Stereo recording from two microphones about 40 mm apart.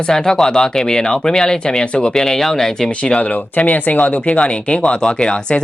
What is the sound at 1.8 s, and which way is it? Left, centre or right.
Speech, left.